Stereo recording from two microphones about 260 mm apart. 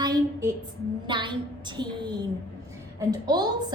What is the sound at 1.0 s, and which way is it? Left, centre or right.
A woman's voice, centre.